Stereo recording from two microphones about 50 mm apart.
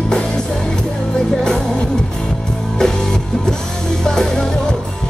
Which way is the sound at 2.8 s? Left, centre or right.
Centre.